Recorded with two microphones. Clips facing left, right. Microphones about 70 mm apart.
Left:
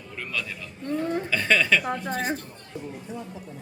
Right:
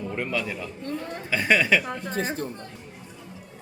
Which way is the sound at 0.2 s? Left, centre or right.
Right.